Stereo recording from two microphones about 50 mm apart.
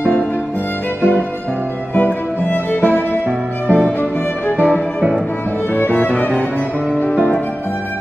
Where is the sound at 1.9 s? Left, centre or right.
Left.